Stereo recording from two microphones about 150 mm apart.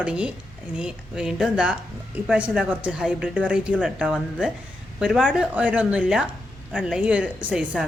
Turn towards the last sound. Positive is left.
turn(degrees=-5)  # may be behind; listen again after turning